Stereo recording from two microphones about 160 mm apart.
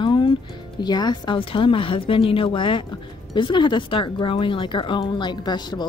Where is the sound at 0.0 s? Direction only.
30° left (ahead or behind).